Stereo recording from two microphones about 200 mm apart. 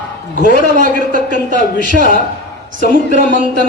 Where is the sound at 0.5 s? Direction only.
40° right (ahead or behind).